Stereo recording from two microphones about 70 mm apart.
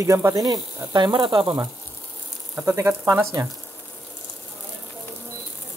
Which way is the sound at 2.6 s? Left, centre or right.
Right.